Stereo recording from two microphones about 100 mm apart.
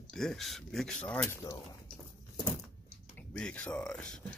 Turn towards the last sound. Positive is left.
turn(degrees=10)  # may be behind; listen again after turning